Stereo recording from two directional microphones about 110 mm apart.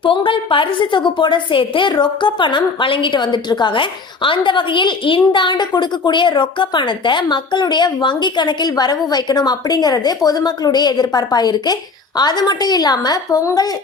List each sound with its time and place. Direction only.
0.0 s a woman's voice: 50° left (ahead or behind); by 13.7 s 35° left (ahead or behind)